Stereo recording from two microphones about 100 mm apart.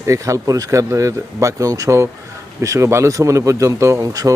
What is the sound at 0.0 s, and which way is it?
Speech, 30° right (ahead or behind).